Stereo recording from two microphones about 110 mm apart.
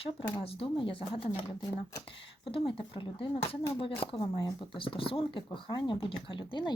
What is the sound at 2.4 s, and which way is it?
Speech, 55° left (ahead or behind).